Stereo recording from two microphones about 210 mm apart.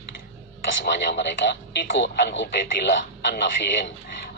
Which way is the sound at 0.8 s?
55° left (ahead or behind).